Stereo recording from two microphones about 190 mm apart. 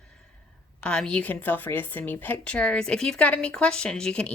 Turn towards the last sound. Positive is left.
turn(degrees=5)  # may be behind; listen again after turning